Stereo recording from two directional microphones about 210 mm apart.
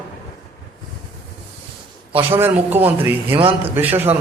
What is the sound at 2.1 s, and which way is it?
A man's voice, 10° right (ahead or behind).